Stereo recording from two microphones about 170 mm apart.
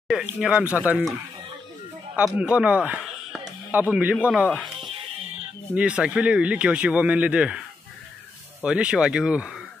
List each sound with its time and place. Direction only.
0.1 s speech: 5° right (ahead or behind)
2.1 s speech: 5° right (ahead or behind)
4.7 s music: 30° right (ahead or behind)
5.8 s speech: 5° right (ahead or behind)
8.6 s speech: 5° right (ahead or behind)